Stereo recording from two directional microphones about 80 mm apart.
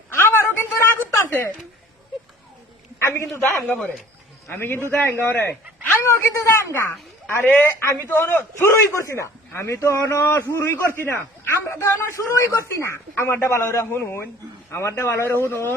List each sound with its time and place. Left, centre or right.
0.2 s a sound: left
3.0 s a man's voice: left
3.3 s a man's voice: left